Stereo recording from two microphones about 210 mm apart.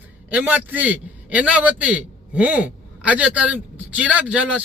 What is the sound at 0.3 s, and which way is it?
A man's voice, 5° right (ahead or behind).